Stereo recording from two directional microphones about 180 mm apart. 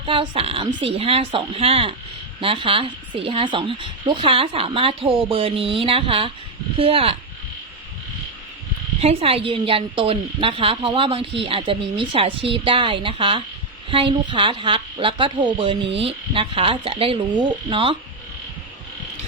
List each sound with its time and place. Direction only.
0.0 s a woman's voice: 30° right (ahead or behind)
9.0 s a woman's voice: 35° right (ahead or behind)